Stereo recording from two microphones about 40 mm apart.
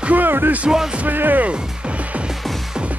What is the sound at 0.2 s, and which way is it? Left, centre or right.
Music, right.